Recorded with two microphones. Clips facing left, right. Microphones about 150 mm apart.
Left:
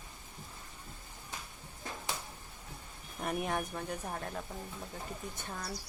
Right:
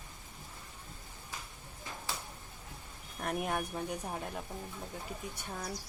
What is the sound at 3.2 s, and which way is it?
Speech, centre (ahead or behind).